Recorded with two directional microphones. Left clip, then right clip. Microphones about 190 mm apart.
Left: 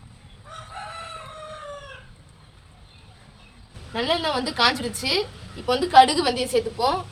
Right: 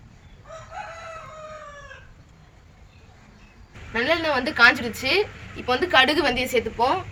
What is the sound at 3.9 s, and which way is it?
A woman's voice, 5° right (ahead or behind).